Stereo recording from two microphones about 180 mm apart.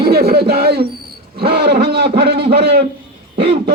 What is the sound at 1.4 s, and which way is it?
A man's voice, 65° right (ahead or behind).